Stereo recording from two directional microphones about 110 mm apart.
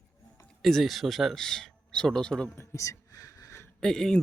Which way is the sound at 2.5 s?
25° left (ahead or behind).